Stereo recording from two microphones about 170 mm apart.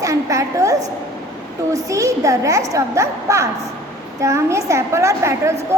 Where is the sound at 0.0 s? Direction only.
20° right (ahead or behind).